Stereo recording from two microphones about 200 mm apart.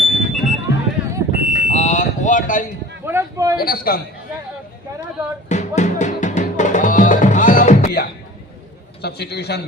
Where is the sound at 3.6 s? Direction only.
50° left (ahead or behind).